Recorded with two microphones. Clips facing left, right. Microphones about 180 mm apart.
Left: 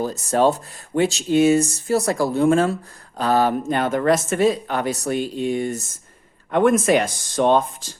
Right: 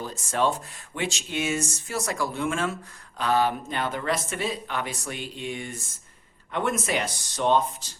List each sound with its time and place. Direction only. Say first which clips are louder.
0.0 s speech: left 8 dB; 40° left (ahead or behind)